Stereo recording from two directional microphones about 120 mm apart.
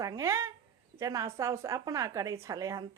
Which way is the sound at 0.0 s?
25° right (ahead or behind).